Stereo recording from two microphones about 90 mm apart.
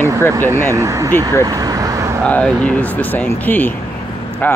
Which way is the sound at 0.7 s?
35° right (ahead or behind).